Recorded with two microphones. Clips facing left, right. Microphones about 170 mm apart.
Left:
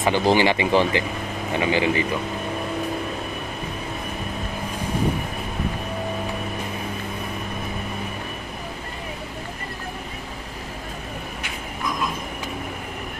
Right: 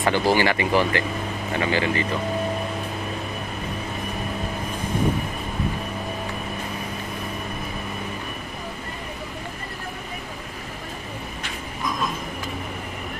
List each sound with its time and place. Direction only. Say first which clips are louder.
0.0 s speech: left 1 dB; 20° left (ahead or behind)